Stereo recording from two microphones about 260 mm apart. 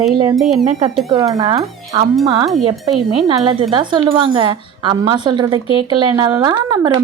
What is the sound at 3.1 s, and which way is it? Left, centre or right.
A woman's voice, centre.